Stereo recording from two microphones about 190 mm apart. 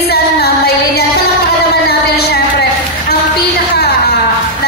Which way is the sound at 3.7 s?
55° left (ahead or behind).